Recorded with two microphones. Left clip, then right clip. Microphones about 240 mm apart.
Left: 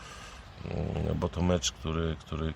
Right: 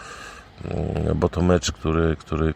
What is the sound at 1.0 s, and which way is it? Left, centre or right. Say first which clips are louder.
Speech: right 11 dB; right.